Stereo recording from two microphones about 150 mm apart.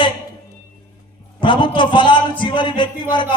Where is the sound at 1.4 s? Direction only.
35° left (ahead or behind).